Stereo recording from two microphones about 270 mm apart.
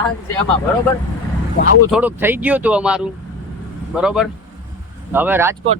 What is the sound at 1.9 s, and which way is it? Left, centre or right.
Speech, centre.